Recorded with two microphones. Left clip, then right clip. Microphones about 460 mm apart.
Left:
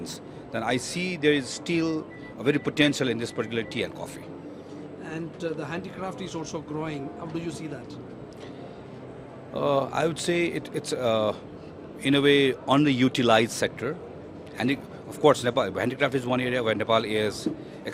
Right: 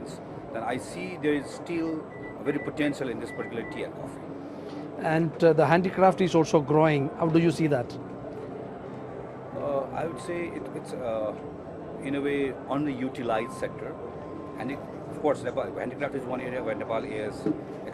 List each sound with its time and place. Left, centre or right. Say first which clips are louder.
0.5 s speech: left 4 dB; left
5.0 s speech: right 11 dB; right
9.6 s a man's voice: left 5 dB; left